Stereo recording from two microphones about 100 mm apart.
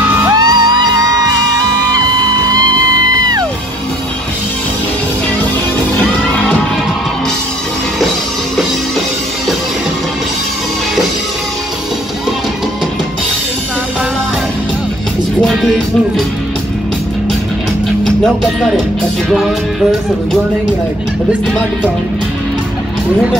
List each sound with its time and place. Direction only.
0.3 s music: 45° right (ahead or behind)
3.1 s music: 40° right (ahead or behind)
18.2 s speech: centre (ahead or behind)